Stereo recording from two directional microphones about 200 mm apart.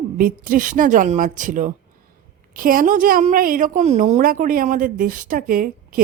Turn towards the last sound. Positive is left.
turn(degrees=-45)  # may be behind; listen again after turning